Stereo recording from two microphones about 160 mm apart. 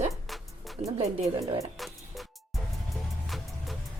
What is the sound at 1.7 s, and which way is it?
Music, centre (ahead or behind).